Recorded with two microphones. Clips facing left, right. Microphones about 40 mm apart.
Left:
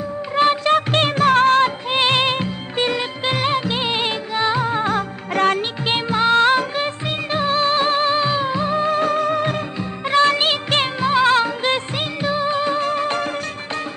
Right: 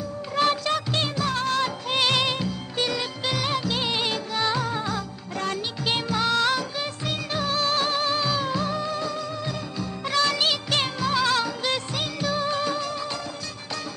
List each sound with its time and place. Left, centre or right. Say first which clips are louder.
0.4 s music: left 7 dB; left
1.9 s music of bollywood: left 5 dB; left
5.9 s music: left 7 dB; left
9.8 s music: left 7 dB; left
12.7 s music: left 9 dB; left